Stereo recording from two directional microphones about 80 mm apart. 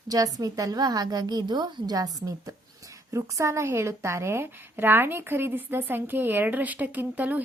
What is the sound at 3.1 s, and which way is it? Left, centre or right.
A woman's voice, right.